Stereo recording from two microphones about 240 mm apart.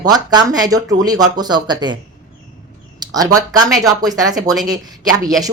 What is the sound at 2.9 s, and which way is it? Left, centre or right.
A woman's voice, centre.